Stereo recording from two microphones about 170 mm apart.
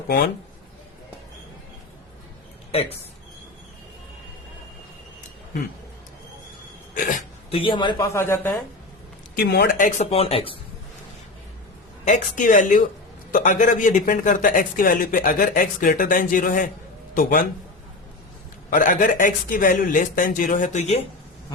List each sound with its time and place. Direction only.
6.9 s speech: 50° left (ahead or behind)
7.5 s speech: 30° left (ahead or behind)
7.9 s speech: 15° left (ahead or behind)
9.3 s speech: 65° left (ahead or behind)
9.7 s speech: 50° left (ahead or behind)
10.1 s speech: 35° left (ahead or behind)
12.0 s speech: 45° left (ahead or behind)
18.7 s speech: 50° left (ahead or behind)